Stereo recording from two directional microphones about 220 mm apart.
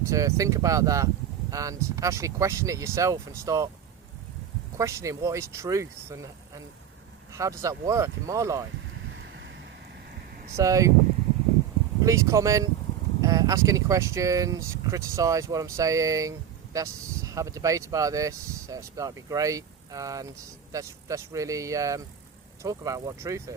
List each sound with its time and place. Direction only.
0.0 s speech: 15° right (ahead or behind)
4.8 s speech: 15° right (ahead or behind)
9.1 s wind: 55° right (ahead or behind)
10.6 s speech: 15° right (ahead or behind)
12.0 s speech: 15° right (ahead or behind)